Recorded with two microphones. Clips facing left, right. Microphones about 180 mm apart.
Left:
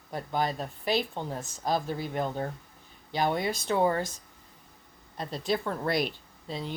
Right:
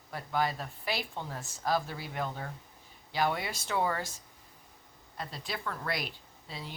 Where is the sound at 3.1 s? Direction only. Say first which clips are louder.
Left 4 dB; 20° left (ahead or behind).